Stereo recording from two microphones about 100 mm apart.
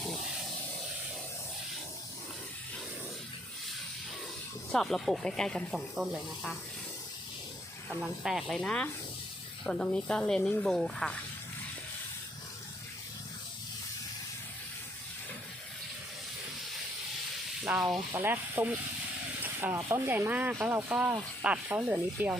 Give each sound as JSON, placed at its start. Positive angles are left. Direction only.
{"t": 0.0, "sound": "vehicle", "side_deg": 5}
{"t": 4.7, "sound": "speech", "side_deg": 5}
{"t": 8.0, "sound": "speech", "side_deg": -5}
{"t": 8.5, "sound": "speech", "side_deg": 10}
{"t": 17.6, "sound": "speech", "side_deg": -5}
{"t": 18.1, "sound": "speech", "side_deg": -20}